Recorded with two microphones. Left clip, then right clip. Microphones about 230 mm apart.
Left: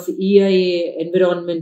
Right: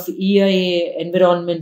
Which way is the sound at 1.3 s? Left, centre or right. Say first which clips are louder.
Right 3 dB; right.